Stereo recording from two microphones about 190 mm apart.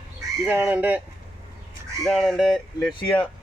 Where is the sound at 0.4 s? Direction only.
10° right (ahead or behind).